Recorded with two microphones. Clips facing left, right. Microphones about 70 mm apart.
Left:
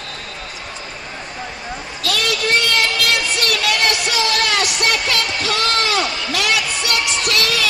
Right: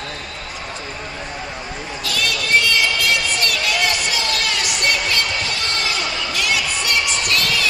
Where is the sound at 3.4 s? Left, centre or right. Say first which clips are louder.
Left 2 dB; left.